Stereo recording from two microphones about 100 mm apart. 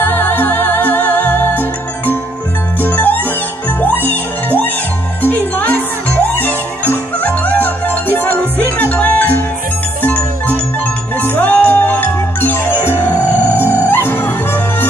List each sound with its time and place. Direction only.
0.0 s music: 20° left (ahead or behind)